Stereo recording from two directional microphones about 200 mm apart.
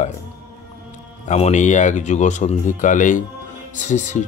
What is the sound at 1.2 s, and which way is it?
Speech, 35° left (ahead or behind).